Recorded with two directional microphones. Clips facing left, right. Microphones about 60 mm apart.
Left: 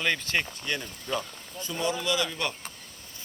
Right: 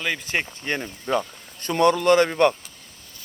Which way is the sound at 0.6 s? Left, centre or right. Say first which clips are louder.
Right 6 dB; right.